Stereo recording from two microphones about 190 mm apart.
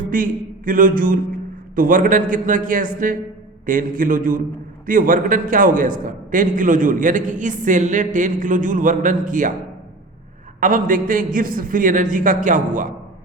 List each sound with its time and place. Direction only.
0.1 s a man's voice: 45° right (ahead or behind)
10.6 s a man's voice: 45° right (ahead or behind)